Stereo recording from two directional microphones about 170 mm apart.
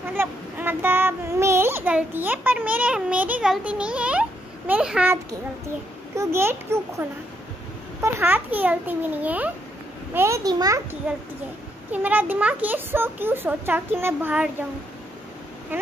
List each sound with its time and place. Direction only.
0.1 s a child's voice: 10° right (ahead or behind)
11.9 s a child's voice: 10° right (ahead or behind)
15.7 s a child's voice: 10° right (ahead or behind)